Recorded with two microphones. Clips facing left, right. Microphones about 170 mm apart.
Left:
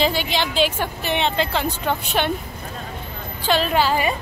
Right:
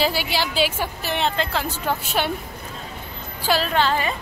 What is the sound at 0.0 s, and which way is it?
Speech, 10° right (ahead or behind).